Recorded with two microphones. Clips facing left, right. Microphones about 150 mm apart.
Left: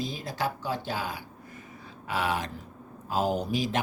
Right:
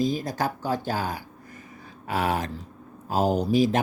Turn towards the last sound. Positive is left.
turn(degrees=-40)  # may be behind; listen again after turning